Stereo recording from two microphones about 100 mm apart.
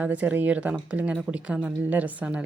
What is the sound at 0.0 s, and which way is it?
Speech, 15° right (ahead or behind).